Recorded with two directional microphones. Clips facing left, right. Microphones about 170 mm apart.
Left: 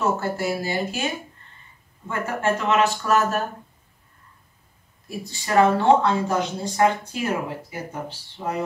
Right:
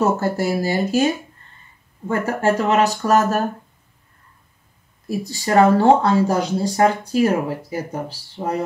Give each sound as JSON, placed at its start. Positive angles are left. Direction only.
{"t": 0.0, "sound": "speech", "side_deg": -40}
{"t": 2.0, "sound": "speech", "side_deg": -40}
{"t": 5.0, "sound": "speech", "side_deg": -40}